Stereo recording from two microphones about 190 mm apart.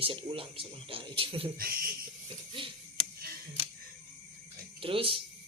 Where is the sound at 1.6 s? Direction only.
50° right (ahead or behind).